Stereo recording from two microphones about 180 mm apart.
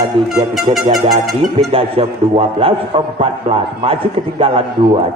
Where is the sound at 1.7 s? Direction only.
30° right (ahead or behind).